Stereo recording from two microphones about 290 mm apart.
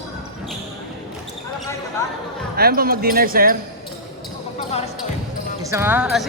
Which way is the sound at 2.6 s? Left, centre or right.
Right.